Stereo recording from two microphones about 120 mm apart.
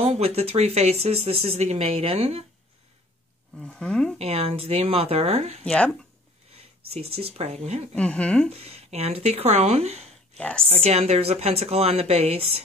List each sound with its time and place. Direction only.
0.2 s speech: 55° right (ahead or behind)
3.5 s speech: 5° left (ahead or behind)
4.2 s speech: 60° right (ahead or behind)
5.7 s speech: 5° left (ahead or behind)
6.5 s speech: 55° right (ahead or behind)
7.9 s speech: 10° left (ahead or behind)
8.5 s speech: 55° right (ahead or behind)
10.3 s speech: 5° left (ahead or behind)
10.7 s speech: 60° right (ahead or behind)